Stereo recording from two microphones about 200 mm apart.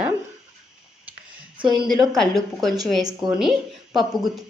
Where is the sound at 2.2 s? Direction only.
Centre (ahead or behind).